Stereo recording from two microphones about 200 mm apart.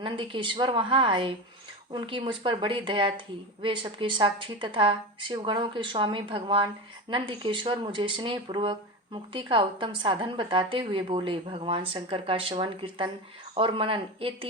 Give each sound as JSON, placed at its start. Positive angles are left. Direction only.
{"t": 0.0, "sound": "speech", "side_deg": -25}